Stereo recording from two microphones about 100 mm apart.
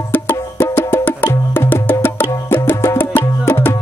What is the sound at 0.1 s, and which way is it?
Music, 20° left (ahead or behind).